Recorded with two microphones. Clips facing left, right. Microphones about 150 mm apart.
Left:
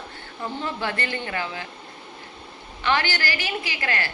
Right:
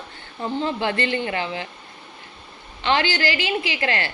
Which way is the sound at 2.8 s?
20° right (ahead or behind).